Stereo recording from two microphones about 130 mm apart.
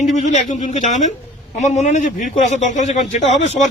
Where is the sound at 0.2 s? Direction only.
65° left (ahead or behind).